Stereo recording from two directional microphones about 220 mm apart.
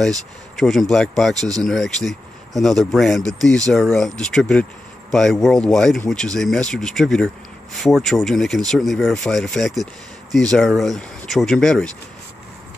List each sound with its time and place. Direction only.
0.6 s speech: centre (ahead or behind)
1.3 s speech: 15° right (ahead or behind)
1.6 s speech: centre (ahead or behind)